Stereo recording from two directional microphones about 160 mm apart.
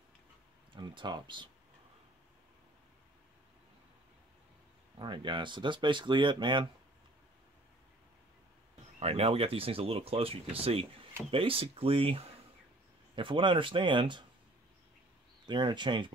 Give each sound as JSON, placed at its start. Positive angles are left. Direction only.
{"t": 0.7, "sound": "speech", "side_deg": -25}
{"t": 4.9, "sound": "speech", "side_deg": -30}
{"t": 9.0, "sound": "speech", "side_deg": -40}
{"t": 15.4, "sound": "speech", "side_deg": -30}